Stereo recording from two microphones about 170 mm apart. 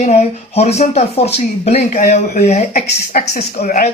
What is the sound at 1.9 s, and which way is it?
Speech, 50° left (ahead or behind).